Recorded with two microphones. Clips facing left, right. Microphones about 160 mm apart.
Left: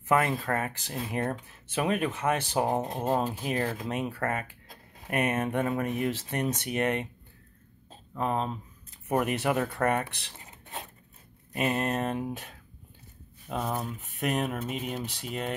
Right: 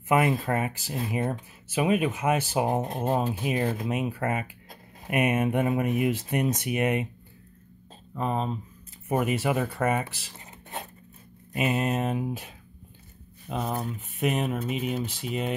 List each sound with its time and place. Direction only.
0.1 s speech: 10° right (ahead or behind)
8.1 s speech: centre (ahead or behind)
11.5 s speech: 5° right (ahead or behind)